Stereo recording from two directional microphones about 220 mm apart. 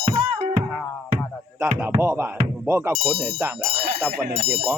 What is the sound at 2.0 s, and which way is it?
Music, 10° right (ahead or behind).